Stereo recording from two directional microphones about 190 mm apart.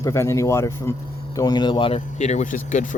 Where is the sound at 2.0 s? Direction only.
40° left (ahead or behind).